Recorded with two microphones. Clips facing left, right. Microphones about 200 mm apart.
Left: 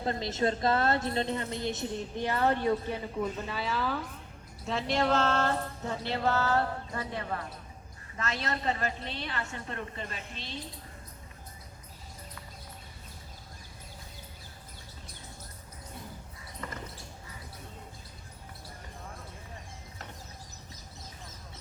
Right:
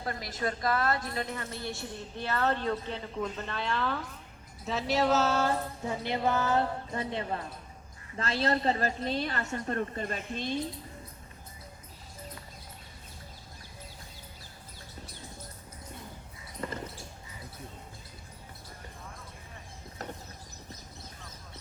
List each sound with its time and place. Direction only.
0.0 s a woman's voice: 25° left (ahead or behind); by 4.0 s 5° left (ahead or behind)
4.6 s music: centre (ahead or behind); by 7.4 s 25° right (ahead or behind)
8.1 s a woman's voice: 30° right (ahead or behind); by 10.6 s 50° right (ahead or behind)
16.6 s basketball bounce: 30° right (ahead or behind)